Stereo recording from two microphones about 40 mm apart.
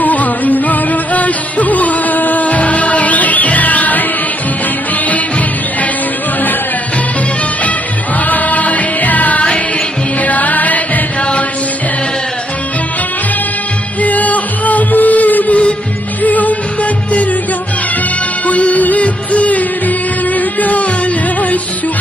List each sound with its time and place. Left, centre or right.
0.0 s music: left
8.3 s music: left
14.0 s music: left
18.5 s music: left